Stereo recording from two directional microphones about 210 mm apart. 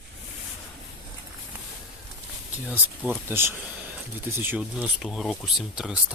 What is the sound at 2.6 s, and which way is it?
Speech, 5° right (ahead or behind).